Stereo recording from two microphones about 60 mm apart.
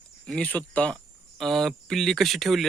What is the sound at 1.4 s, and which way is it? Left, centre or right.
Speech, centre.